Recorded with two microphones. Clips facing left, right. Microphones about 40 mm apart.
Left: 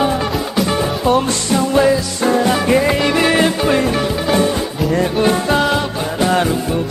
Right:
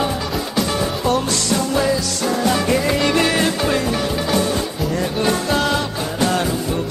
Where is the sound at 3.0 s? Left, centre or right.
Centre.